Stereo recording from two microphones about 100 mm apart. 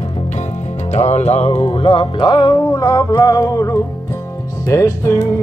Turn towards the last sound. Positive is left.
turn(degrees=30)  # may be behind; listen again after turning